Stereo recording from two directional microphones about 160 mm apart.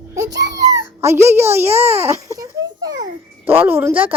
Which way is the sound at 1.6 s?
40° right (ahead or behind).